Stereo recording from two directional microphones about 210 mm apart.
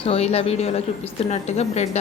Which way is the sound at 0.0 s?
30° left (ahead or behind).